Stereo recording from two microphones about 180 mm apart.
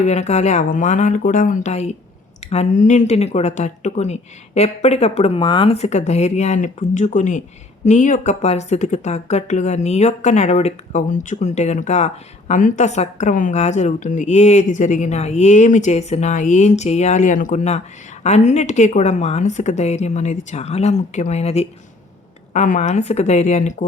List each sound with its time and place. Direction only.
0.0 s speech: 40° left (ahead or behind)